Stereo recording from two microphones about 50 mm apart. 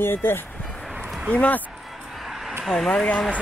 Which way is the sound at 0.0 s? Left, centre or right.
Left.